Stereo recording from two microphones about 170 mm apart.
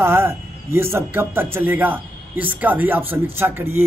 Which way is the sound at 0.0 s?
15° right (ahead or behind).